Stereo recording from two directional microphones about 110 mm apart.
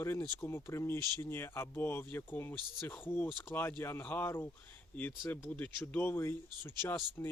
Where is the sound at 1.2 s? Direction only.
20° left (ahead or behind).